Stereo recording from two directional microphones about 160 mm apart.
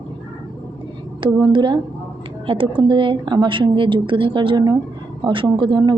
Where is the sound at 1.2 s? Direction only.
30° right (ahead or behind).